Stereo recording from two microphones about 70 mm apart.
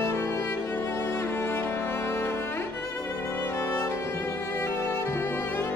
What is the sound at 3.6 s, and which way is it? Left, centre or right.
Music, left.